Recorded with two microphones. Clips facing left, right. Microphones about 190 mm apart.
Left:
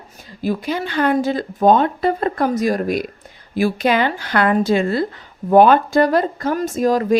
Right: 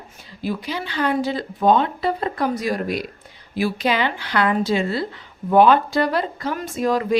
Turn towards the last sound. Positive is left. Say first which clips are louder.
# left 4 dB
turn(degrees=40)  # may be behind; listen again after turning